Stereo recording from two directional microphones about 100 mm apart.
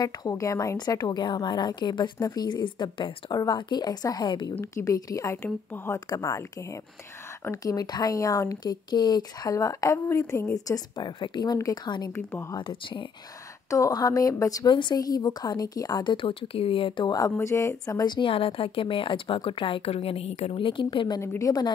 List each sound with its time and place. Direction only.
0.0 s speech: 35° left (ahead or behind)
0.7 s a woman's voice: 45° left (ahead or behind)
4.6 s speech: 35° left (ahead or behind)
5.9 s a woman's voice: 40° left (ahead or behind)
11.5 s speech: 40° left (ahead or behind)
12.1 s speech: 25° left (ahead or behind)
12.5 s a woman's voice: 55° left (ahead or behind)
13.7 s speech: 35° left (ahead or behind)
14.7 s a woman's voice: 50° left (ahead or behind)
17.1 s speech: 30° left (ahead or behind)
18.3 s a woman's voice: 70° left (ahead or behind)
21.2 s speech: 30° left (ahead or behind)